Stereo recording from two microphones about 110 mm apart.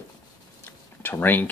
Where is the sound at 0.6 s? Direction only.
20° left (ahead or behind).